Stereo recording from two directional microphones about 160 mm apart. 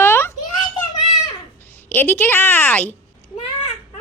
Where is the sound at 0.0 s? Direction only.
15° left (ahead or behind).